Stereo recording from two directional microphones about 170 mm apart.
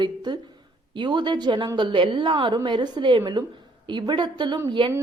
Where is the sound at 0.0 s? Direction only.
25° right (ahead or behind).